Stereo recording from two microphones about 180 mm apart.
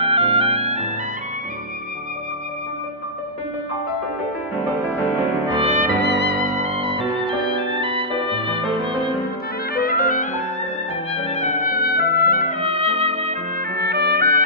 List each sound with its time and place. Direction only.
0.0 s music: 30° right (ahead or behind)
5.4 s music: 30° right (ahead or behind)
6.0 s music: 65° right (ahead or behind)
6.6 s music: 30° right (ahead or behind)
9.8 s music: 55° left (ahead or behind)
11.1 s music: 35° left (ahead or behind); by 12.5 s 55° left (ahead or behind)
12.6 s music: 35° right (ahead or behind)
13.7 s music: 65° right (ahead or behind)